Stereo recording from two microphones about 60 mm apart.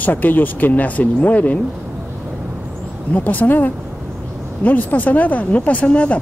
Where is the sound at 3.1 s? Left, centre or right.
Left.